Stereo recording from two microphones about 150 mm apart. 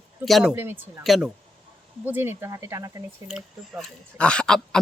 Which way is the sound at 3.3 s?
Centre (ahead or behind).